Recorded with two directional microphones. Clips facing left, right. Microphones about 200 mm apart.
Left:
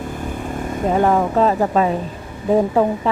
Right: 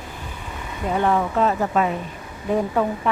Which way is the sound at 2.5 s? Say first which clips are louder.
Left 5 dB; 30° left (ahead or behind).